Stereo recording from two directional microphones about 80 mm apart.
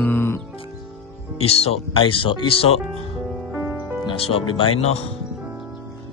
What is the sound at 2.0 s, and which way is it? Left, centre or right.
Speech, left.